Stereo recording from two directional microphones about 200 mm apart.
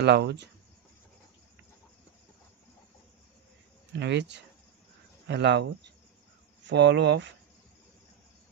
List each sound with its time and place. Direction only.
0.0 s speech: 55° right (ahead or behind)
4.0 s speech: 60° right (ahead or behind)